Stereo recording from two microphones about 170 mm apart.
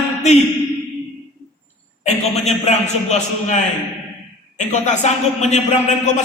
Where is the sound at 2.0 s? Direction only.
40° left (ahead or behind).